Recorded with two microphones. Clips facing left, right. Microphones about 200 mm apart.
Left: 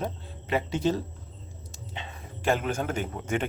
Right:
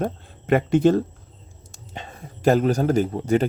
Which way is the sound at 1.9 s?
40° right (ahead or behind).